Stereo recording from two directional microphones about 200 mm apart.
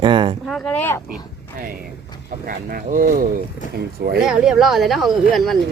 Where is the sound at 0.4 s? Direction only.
Centre (ahead or behind).